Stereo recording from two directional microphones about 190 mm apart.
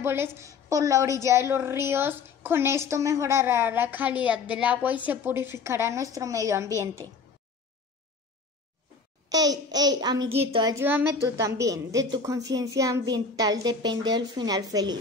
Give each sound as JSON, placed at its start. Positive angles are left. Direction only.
{"t": 0.0, "sound": "a woman's voice", "side_deg": -10}
{"t": 9.3, "sound": "a woman's voice", "side_deg": -20}
{"t": 10.7, "sound": "a woman's voice", "side_deg": -10}